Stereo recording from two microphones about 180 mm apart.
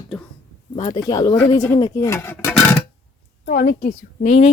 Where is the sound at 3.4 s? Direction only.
60° left (ahead or behind); by 4.4 s 40° left (ahead or behind).